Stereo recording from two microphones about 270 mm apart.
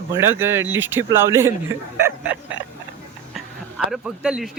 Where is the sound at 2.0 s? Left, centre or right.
Centre.